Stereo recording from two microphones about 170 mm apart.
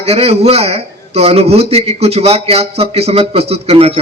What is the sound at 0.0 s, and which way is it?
A man's voice, 35° right (ahead or behind).